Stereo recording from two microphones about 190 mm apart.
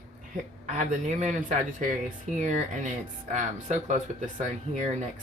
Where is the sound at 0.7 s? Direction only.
40° right (ahead or behind).